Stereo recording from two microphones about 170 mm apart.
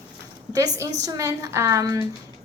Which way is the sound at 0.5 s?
20° right (ahead or behind).